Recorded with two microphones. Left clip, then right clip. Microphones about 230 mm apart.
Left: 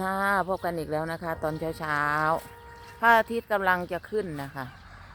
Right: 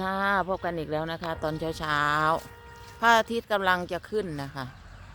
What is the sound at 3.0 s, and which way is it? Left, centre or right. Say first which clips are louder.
A woman's voice: left 1 dB; centre.